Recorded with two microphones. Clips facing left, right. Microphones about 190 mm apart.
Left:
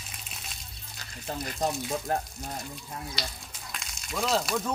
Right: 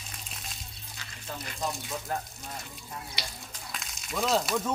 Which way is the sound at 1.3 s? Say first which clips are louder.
Left 5 dB; 40° left (ahead or behind).